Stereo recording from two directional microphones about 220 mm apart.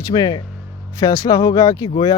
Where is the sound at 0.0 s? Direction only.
15° left (ahead or behind).